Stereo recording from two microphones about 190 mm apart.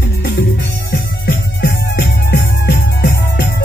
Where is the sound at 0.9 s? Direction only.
60° left (ahead or behind).